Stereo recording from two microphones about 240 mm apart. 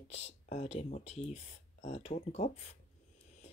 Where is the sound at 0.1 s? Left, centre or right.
Left.